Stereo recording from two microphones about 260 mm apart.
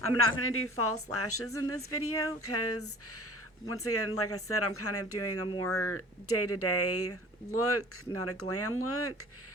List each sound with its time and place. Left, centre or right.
0.0 s speech: left